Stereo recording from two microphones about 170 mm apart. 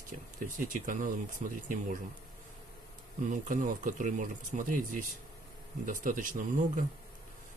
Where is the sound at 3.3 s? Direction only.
50° right (ahead or behind).